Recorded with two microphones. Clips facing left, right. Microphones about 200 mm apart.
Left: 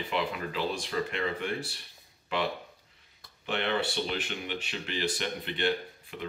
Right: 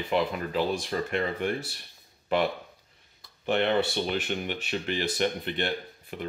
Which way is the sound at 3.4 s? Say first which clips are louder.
Right 6 dB; 45° right (ahead or behind).